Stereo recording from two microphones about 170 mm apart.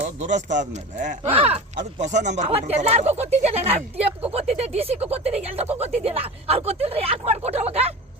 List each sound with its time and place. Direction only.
0.0 s speech: 45° right (ahead or behind)
1.3 s speech: 35° right (ahead or behind)